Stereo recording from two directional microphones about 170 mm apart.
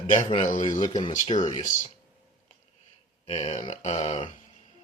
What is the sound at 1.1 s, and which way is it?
Speech, 45° left (ahead or behind).